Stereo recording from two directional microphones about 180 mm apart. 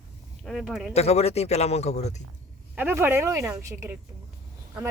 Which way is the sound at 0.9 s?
35° left (ahead or behind).